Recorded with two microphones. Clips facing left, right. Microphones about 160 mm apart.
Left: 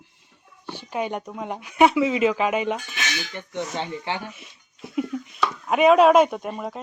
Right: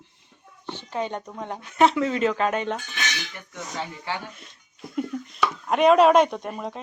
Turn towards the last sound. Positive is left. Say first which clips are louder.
# left 1 dB
turn(degrees=5)  # may be behind; listen again after turning